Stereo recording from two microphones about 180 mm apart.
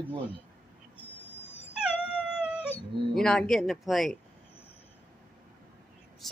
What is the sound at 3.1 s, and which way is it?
Speech, 5° left (ahead or behind).